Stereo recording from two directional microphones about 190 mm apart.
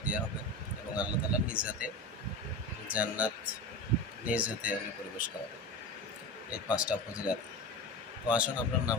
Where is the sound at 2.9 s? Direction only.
5° right (ahead or behind).